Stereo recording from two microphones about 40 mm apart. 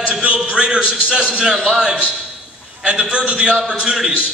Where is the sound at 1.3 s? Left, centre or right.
Centre.